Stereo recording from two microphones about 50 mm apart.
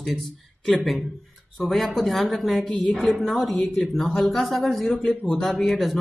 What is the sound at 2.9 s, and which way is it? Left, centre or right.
Speech, centre.